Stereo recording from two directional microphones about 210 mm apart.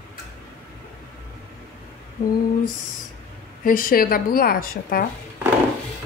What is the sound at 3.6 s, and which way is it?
A woman's voice, 45° left (ahead or behind).